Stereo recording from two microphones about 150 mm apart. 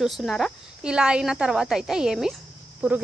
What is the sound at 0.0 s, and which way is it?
Speech, centre (ahead or behind).